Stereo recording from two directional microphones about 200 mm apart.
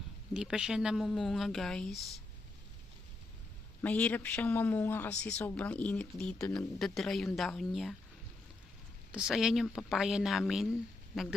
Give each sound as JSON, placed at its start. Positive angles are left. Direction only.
{"t": 0.3, "sound": "speech", "side_deg": -5}
{"t": 3.8, "sound": "speech", "side_deg": 5}
{"t": 9.1, "sound": "speech", "side_deg": -5}